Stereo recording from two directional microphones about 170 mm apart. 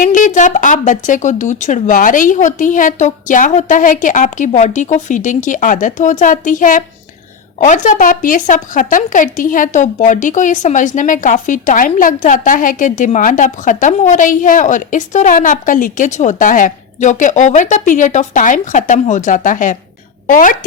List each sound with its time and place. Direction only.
0.0 s speech: 50° left (ahead or behind)